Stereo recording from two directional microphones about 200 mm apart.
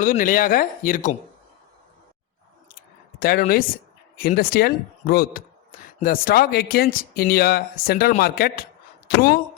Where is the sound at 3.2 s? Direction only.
45° left (ahead or behind).